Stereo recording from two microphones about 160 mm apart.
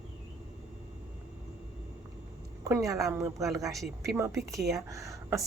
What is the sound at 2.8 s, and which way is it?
A woman's voice, 20° right (ahead or behind).